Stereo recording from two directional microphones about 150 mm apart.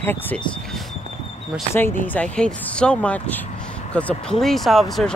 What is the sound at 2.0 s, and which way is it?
Speech, 10° left (ahead or behind).